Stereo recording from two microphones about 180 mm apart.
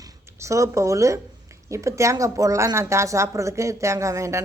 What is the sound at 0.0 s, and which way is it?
A woman's voice, 15° right (ahead or behind).